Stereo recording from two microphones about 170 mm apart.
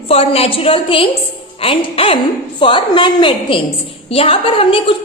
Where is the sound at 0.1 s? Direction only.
35° left (ahead or behind).